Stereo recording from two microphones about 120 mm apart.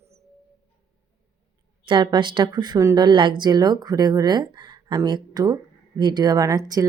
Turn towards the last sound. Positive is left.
turn(degrees=-30)  # may be behind; listen again after turning